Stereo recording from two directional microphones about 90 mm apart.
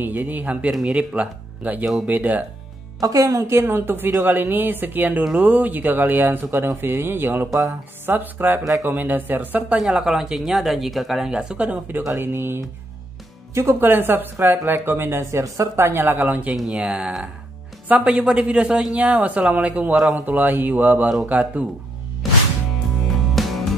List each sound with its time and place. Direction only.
0.0 s speech: 20° right (ahead or behind)
3.0 s speech: 40° right (ahead or behind); by 9.8 s 20° right (ahead or behind)
9.8 s speech: 5° right (ahead or behind)
12.2 s speech: 25° right (ahead or behind)
13.6 s speech: 25° right (ahead or behind)
16.5 s speech: 5° right (ahead or behind)
23.3 s music: centre (ahead or behind)